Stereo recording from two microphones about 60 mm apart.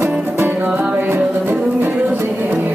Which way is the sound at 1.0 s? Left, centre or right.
Right.